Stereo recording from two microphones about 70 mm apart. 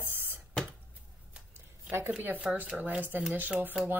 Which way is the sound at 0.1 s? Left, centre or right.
Right.